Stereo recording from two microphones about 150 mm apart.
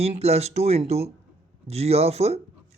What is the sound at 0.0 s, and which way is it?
Speech, 45° right (ahead or behind).